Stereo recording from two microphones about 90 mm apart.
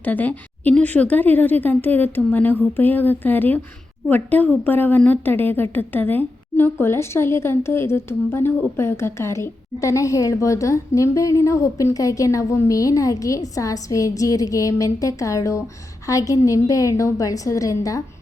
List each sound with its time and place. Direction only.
0.0 s a woman's voice: 20° left (ahead or behind); by 18.0 s 40° left (ahead or behind)